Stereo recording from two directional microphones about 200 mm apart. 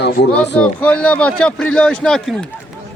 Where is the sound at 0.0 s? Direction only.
55° left (ahead or behind).